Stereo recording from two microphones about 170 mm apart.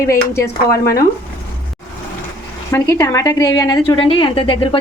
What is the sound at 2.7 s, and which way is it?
A woman's voice, 15° left (ahead or behind).